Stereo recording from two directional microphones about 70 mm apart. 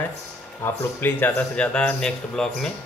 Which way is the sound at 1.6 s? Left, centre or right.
Centre.